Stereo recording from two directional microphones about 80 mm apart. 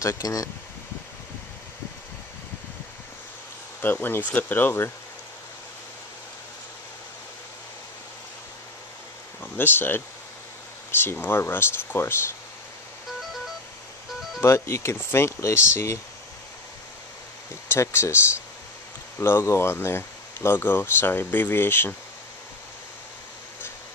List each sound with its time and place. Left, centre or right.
0.0 s speech: left
3.8 s speech: left
9.4 s speech: left
14.4 s speech: left
17.6 s speech: left